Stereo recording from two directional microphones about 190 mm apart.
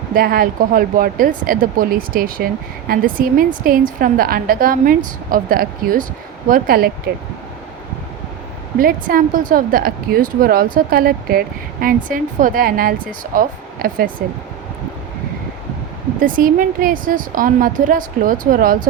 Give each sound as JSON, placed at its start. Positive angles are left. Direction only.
{"t": 0.1, "sound": "a woman's voice", "side_deg": -50}
{"t": 8.8, "sound": "a woman's voice", "side_deg": -50}
{"t": 16.2, "sound": "a woman's voice", "side_deg": -45}